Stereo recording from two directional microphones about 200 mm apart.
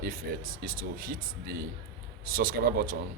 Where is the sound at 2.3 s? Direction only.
45° right (ahead or behind).